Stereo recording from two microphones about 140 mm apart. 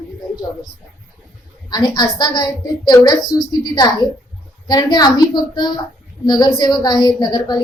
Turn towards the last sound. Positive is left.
turn(degrees=30)  # may be behind; listen again after turning